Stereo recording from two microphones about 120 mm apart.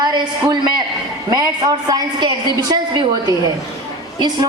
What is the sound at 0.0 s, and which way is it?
A man's voice, 35° right (ahead or behind).